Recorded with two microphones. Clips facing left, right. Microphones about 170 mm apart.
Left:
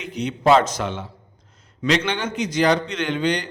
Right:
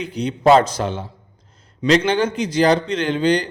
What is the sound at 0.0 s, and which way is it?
Speech, 35° right (ahead or behind).